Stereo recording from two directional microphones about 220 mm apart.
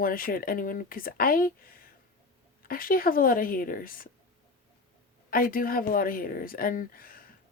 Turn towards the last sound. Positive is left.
turn(degrees=40)  # may be behind; listen again after turning